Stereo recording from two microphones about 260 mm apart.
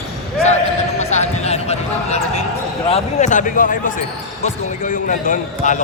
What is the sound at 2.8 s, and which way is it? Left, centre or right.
Speech, left.